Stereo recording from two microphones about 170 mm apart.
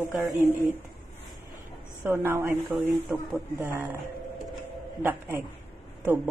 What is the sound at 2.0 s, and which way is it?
Speech, 15° right (ahead or behind).